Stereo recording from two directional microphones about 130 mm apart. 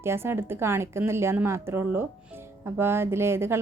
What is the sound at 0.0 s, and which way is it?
A woman's voice, 20° right (ahead or behind).